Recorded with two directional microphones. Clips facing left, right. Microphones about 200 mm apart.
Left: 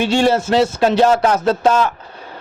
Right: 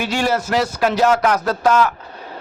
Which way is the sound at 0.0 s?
30° left (ahead or behind).